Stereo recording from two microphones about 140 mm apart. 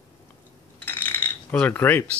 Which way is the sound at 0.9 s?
15° left (ahead or behind).